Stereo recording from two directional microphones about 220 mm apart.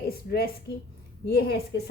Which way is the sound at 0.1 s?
45° left (ahead or behind).